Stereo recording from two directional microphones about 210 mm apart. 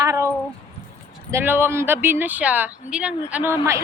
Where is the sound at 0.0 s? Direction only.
15° right (ahead or behind).